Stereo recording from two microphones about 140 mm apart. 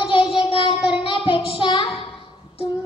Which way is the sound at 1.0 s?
40° left (ahead or behind).